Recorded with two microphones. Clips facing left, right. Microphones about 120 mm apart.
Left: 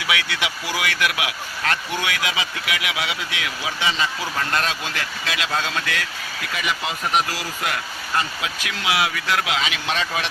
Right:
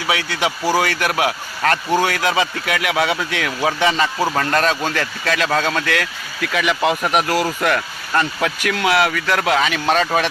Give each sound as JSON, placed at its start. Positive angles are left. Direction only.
{"t": 0.1, "sound": "speech", "side_deg": -40}